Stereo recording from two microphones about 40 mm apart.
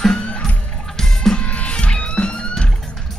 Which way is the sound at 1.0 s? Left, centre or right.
Centre.